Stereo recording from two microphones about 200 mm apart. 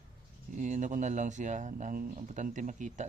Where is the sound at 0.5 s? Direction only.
40° right (ahead or behind).